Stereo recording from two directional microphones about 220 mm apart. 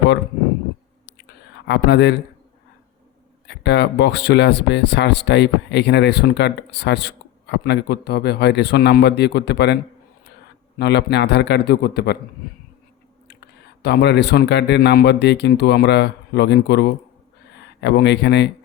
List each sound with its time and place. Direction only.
1.2 s a sound: 50° left (ahead or behind)
3.4 s speech: 50° left (ahead or behind)
10.8 s speech: 50° left (ahead or behind)
13.2 s speech: 50° left (ahead or behind)